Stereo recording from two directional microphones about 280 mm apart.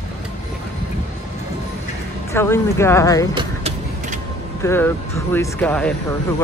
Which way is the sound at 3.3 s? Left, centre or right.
Right.